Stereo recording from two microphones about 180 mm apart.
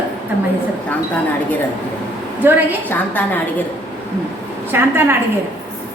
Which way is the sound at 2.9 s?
10° left (ahead or behind).